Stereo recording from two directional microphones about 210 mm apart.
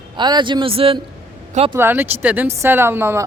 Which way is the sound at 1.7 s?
10° right (ahead or behind).